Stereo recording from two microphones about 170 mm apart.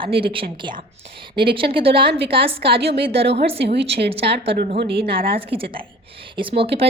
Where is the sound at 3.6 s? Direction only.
85° right.